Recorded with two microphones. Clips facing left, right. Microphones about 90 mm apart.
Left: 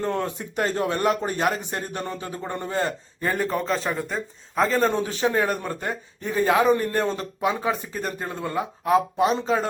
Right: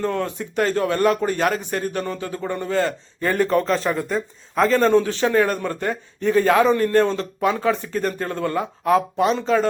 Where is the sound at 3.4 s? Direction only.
10° left (ahead or behind).